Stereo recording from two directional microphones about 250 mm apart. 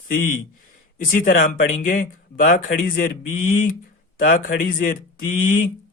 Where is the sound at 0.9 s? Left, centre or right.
Left.